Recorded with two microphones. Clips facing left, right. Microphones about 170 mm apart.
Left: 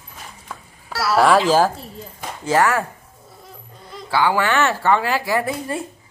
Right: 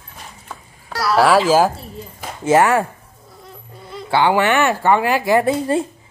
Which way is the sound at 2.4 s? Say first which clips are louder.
Right 4 dB; 25° right (ahead or behind).